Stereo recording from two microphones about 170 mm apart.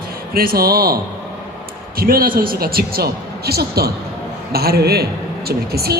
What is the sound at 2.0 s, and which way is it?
A man's voice, 60° right (ahead or behind).